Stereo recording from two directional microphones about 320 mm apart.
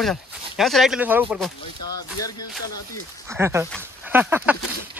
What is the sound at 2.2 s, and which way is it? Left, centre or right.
Music, left.